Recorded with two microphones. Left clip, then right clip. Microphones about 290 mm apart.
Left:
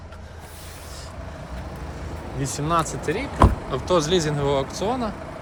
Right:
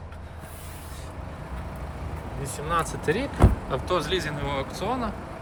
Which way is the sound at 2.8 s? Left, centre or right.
Centre.